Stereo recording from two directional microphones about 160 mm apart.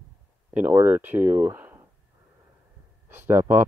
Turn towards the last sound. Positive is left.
turn(degrees=-15)  # may be behind; listen again after turning